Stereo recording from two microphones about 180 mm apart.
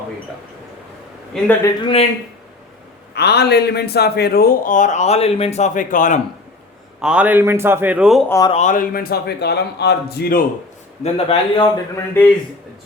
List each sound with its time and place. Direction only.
1.3 s a man's voice: 5° left (ahead or behind)
3.2 s speech: 65° left (ahead or behind); by 6.1 s 45° left (ahead or behind)
7.0 s a man's voice: 5° right (ahead or behind)
8.3 s speech: 20° left (ahead or behind)
8.5 s a man's voice: 45° left (ahead or behind)
11.0 s a man's voice: 30° left (ahead or behind)
11.9 s a man's voice: 10° left (ahead or behind)